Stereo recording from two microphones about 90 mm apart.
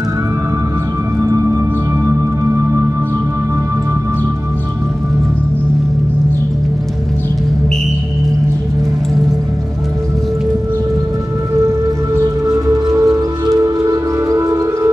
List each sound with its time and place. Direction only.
1.2 s music: 35° right (ahead or behind)
12.2 s music: 40° right (ahead or behind)